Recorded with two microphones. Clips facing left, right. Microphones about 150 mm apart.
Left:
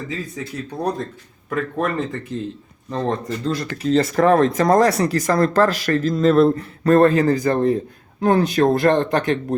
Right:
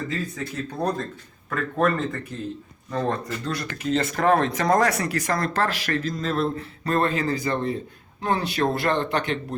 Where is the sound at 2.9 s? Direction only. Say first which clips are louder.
Left 3 dB; 25° left (ahead or behind).